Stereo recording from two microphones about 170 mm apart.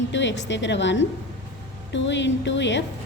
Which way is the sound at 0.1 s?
90° left.